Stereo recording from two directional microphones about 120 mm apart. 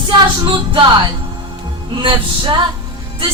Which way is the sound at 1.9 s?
40° right (ahead or behind).